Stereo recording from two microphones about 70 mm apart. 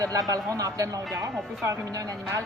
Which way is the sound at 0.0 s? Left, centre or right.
Right.